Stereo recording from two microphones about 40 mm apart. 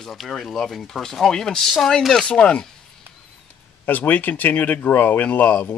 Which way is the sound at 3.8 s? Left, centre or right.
Left.